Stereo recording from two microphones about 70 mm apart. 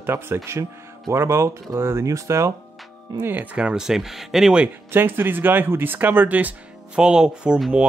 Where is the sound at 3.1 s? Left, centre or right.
Right.